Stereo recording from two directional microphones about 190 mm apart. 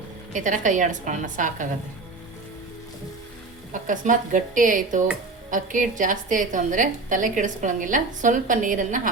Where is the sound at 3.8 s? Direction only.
45° right (ahead or behind).